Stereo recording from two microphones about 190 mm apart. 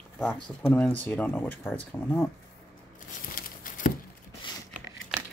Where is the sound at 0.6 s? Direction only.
10° left (ahead or behind).